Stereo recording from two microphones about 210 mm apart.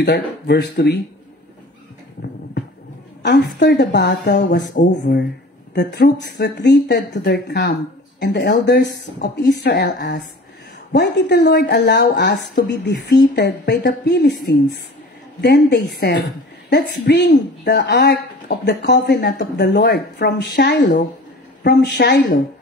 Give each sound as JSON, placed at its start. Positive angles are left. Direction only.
{"t": 0.0, "sound": "speech", "side_deg": 55}
{"t": 3.2, "sound": "speech", "side_deg": 50}
{"t": 4.1, "sound": "speech", "side_deg": 40}
{"t": 15.4, "sound": "speech", "side_deg": 55}